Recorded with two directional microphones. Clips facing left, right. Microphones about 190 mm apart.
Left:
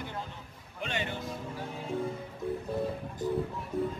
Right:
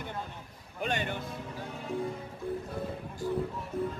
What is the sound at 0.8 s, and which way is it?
Music, 45° right (ahead or behind).